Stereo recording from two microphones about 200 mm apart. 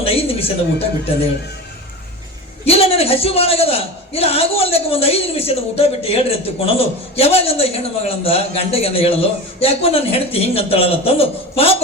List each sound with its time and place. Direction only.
0.0 s speech: 30° left (ahead or behind)
2.6 s a man's voice: 30° left (ahead or behind)